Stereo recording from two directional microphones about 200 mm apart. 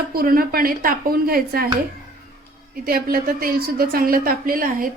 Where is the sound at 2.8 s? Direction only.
50° right (ahead or behind).